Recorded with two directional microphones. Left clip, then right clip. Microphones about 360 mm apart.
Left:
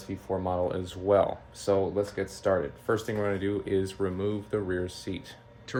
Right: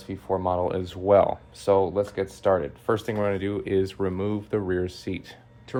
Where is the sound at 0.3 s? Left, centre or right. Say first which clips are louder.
Right 4 dB; centre.